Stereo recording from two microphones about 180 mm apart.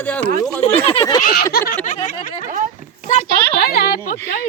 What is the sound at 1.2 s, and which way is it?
Speech, 55° left (ahead or behind).